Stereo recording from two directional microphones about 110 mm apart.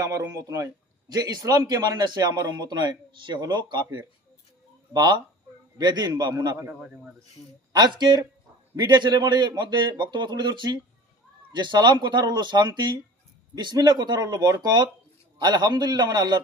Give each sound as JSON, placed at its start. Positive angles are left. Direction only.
{"t": 0.0, "sound": "speech", "side_deg": -30}
{"t": 4.9, "sound": "speech", "side_deg": -40}
{"t": 6.5, "sound": "a man's voice", "side_deg": -25}
{"t": 6.8, "sound": "speech", "side_deg": -10}
{"t": 7.7, "sound": "a man's voice", "side_deg": -40}